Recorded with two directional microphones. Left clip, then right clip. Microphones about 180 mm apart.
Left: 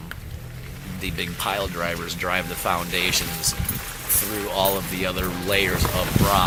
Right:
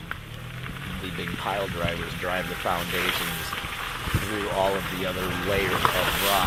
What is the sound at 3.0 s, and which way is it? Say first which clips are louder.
Speech: left 3 dB; 10° left (ahead or behind).